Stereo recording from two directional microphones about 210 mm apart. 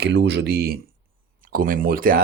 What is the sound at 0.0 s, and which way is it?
Speech, 55° right (ahead or behind).